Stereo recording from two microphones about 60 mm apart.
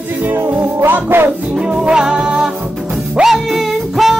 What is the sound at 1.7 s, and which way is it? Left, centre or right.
Music, centre.